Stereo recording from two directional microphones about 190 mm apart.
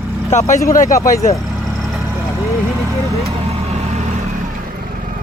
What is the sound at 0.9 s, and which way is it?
Speech, 45° left (ahead or behind).